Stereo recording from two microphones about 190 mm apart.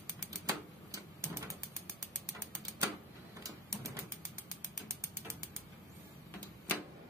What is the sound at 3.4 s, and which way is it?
Typing, 15° right (ahead or behind).